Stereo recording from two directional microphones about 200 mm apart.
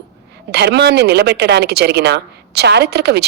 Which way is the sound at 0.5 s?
55° right (ahead or behind).